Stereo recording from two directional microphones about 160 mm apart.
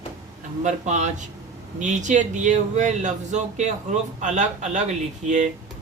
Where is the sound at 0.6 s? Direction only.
50° right (ahead or behind).